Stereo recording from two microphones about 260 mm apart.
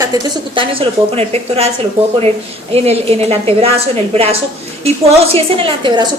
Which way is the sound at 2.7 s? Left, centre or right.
Right.